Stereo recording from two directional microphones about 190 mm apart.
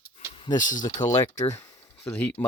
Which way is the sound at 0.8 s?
20° left (ahead or behind).